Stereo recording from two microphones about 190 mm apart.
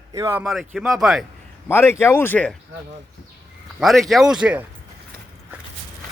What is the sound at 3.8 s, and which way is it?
Speech, centre (ahead or behind).